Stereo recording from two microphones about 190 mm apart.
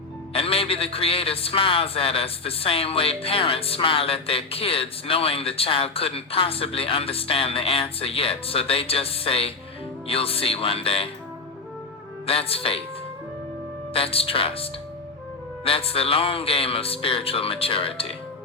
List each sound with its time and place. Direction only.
0.3 s a man's voice: 30° left (ahead or behind)
12.2 s a man's voice: 30° left (ahead or behind)
13.9 s a man's voice: 30° left (ahead or behind)